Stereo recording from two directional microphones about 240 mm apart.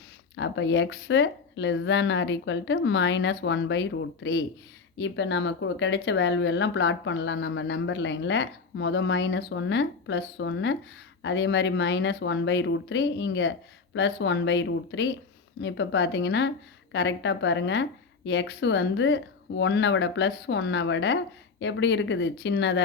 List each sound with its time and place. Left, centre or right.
0.3 s speech: left